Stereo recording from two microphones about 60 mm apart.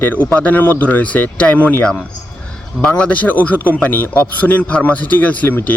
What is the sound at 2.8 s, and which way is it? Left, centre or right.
A man's voice, centre.